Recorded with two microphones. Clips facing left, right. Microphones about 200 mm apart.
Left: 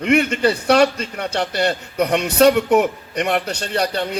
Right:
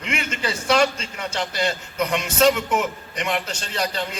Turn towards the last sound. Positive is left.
turn(degrees=60)  # may be behind; listen again after turning